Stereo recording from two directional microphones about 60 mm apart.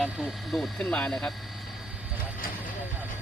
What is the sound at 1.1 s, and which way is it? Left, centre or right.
Speech, centre.